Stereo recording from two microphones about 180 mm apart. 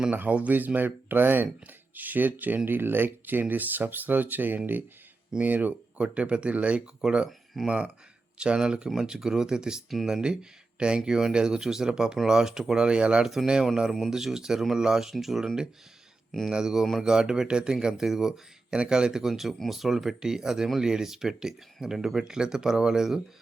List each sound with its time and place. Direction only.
0.0 s speech: 10° right (ahead or behind)